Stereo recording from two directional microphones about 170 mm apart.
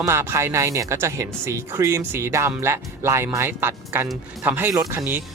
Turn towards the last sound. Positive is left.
turn(degrees=-15)  # may be behind; listen again after turning